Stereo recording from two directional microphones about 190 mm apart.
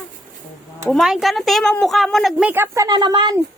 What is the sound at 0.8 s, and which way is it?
A woman's voice, centre (ahead or behind).